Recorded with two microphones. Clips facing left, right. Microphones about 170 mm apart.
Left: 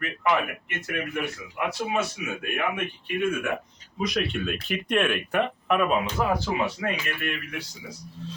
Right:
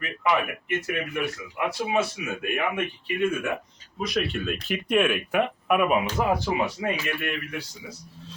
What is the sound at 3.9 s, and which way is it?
Speech, centre (ahead or behind).